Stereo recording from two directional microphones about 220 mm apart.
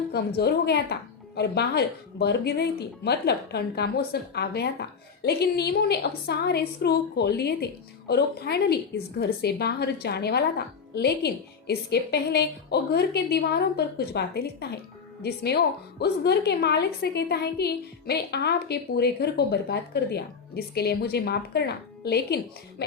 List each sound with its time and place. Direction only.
0.1 s speech: 45° left (ahead or behind)